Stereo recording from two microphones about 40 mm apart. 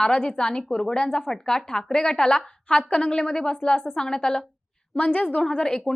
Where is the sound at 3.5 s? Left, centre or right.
Left.